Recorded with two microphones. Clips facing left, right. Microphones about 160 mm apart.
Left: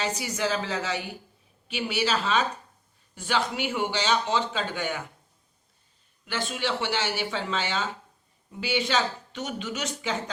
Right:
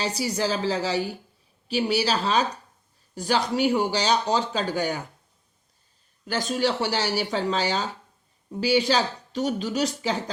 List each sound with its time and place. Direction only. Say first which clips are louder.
0.0 s speech: right 3 dB; 35° right (ahead or behind)
6.2 s speech: right 5 dB; 40° right (ahead or behind)